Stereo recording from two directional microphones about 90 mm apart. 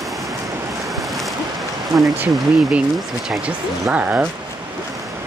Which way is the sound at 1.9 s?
45° right (ahead or behind).